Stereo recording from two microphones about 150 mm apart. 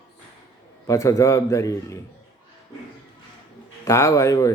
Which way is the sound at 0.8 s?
20° left (ahead or behind).